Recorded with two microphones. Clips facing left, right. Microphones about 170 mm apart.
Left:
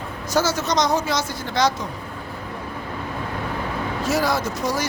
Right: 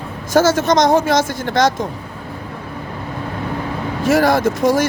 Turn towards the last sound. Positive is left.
turn(degrees=-50)  # may be behind; listen again after turning